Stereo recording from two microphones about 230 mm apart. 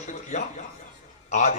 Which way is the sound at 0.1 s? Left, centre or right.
Left.